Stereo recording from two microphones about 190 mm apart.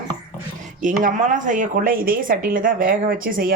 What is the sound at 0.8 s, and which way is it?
Speech, 45° right (ahead or behind).